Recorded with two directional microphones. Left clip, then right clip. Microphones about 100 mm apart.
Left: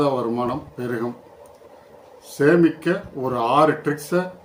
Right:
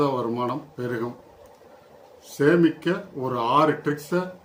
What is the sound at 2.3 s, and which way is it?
Speech, 15° right (ahead or behind).